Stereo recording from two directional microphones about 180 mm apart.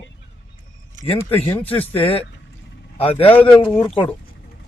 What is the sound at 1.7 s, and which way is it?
Speech, 30° left (ahead or behind).